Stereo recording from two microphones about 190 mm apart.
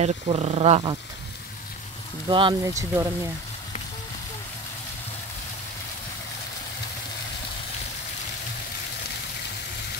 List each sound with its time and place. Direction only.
0.0 s speech: 35° right (ahead or behind)
2.2 s speech: 25° right (ahead or behind)